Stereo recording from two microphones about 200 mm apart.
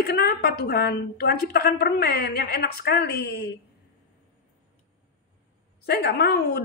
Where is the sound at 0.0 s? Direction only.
50° left (ahead or behind).